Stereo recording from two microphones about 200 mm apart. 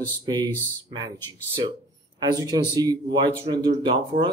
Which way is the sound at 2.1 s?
20° right (ahead or behind).